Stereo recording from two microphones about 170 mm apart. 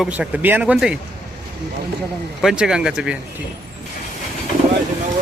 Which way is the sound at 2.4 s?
5° right (ahead or behind).